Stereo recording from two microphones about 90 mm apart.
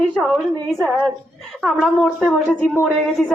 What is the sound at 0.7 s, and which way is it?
A woman's voice, centre (ahead or behind).